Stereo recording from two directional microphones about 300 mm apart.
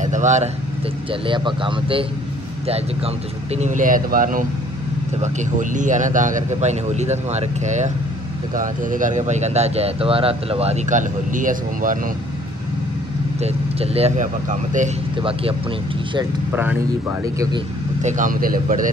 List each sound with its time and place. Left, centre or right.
0.0 s vehicle: right
1.2 s speech: centre
13.4 s speech: centre
16.2 s speech: centre
18.0 s speech: right